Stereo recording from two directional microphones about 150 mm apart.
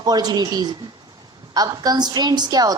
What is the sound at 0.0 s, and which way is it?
A woman's voice, 25° right (ahead or behind).